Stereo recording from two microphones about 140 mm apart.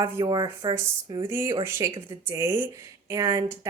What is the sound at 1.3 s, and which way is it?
A woman's voice, 20° right (ahead or behind).